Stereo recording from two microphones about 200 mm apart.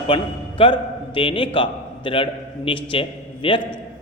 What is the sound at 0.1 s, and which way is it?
A man's voice, 25° left (ahead or behind).